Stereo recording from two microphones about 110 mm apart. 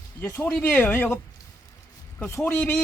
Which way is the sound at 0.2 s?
15° left (ahead or behind).